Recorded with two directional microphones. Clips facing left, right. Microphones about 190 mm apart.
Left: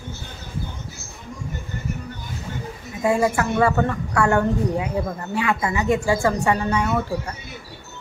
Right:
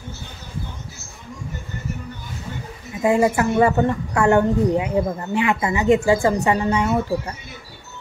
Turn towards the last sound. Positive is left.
turn(degrees=-20)  # may be behind; listen again after turning